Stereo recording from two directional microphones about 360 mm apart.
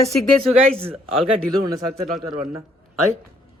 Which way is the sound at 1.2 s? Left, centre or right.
Centre.